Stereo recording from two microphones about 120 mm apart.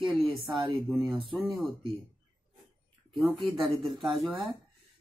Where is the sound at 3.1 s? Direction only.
Centre (ahead or behind).